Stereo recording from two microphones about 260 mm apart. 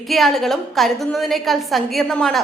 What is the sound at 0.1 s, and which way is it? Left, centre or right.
A woman's voice, centre.